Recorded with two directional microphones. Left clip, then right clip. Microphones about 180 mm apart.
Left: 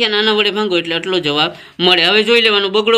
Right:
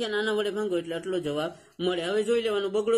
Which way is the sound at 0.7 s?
50° left (ahead or behind).